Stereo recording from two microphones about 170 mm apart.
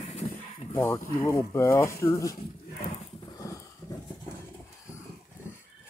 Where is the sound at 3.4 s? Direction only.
15° left (ahead or behind).